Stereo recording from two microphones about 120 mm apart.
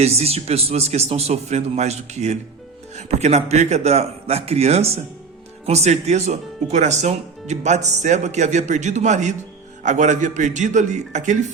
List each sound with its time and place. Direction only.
0.0 s a man's voice: 60° right (ahead or behind); by 11.3 s 85° right